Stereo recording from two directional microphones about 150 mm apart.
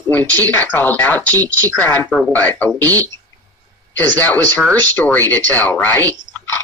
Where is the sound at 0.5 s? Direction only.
10° left (ahead or behind).